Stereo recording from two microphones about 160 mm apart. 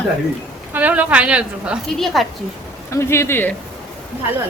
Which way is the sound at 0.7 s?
10° right (ahead or behind).